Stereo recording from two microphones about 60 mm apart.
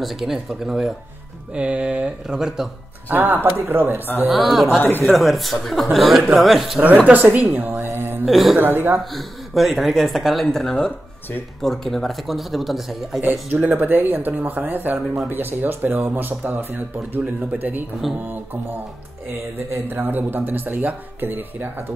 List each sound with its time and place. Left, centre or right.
0.0 s speech: centre
1.5 s speech: centre
3.1 s speech: right
4.3 s speech: centre
6.8 s speech: right
7.9 s music: right
8.3 s speech: centre
8.5 s speech: right
9.1 s speech: centre
13.2 s speech: right
19.9 s speech: right